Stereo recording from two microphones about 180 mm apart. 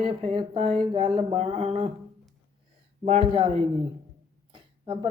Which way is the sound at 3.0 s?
35° right (ahead or behind).